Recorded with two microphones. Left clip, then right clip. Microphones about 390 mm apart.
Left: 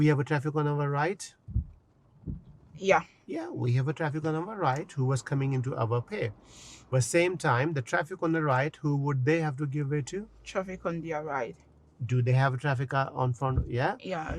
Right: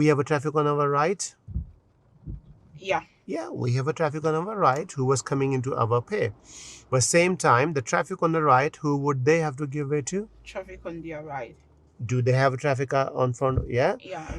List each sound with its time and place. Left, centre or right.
0.0 s speech: right
2.7 s a man's voice: left
3.2 s speech: right
6.9 s speech: right
10.4 s speech: left
12.0 s speech: right